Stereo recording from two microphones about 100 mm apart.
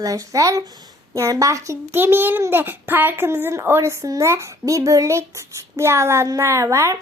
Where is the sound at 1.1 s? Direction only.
35° right (ahead or behind).